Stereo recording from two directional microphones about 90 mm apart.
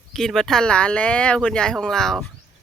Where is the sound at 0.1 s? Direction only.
5° left (ahead or behind).